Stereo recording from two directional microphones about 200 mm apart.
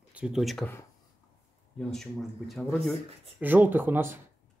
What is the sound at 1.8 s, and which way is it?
Speech, centre (ahead or behind).